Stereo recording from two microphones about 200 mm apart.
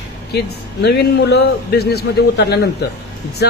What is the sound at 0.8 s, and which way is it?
Speech, 55° left (ahead or behind).